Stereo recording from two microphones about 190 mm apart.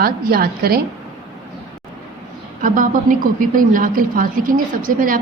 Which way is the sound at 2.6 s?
45° right (ahead or behind).